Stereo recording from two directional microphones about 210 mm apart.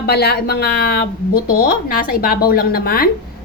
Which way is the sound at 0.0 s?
50° left (ahead or behind).